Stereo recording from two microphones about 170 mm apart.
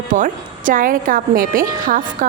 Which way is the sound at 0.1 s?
50° right (ahead or behind).